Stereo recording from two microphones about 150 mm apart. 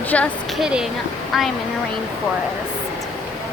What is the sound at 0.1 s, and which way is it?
Speech, 10° left (ahead or behind).